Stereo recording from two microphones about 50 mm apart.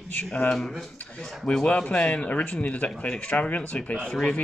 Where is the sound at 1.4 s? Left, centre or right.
Centre.